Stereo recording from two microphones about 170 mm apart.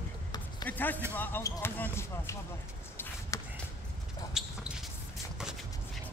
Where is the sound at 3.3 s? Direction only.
20° left (ahead or behind).